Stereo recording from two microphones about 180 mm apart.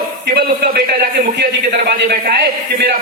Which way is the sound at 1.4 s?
70° right (ahead or behind).